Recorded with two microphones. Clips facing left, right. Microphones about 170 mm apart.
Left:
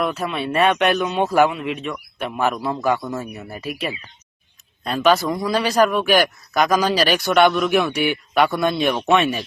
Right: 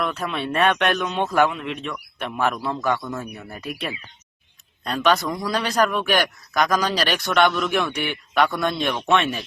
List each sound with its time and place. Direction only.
0.0 s speech: 5° left (ahead or behind)